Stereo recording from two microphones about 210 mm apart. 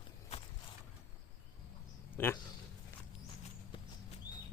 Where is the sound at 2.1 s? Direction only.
10° left (ahead or behind).